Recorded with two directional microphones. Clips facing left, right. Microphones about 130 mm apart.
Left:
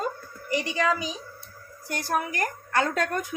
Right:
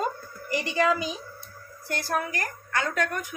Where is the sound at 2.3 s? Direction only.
25° left (ahead or behind).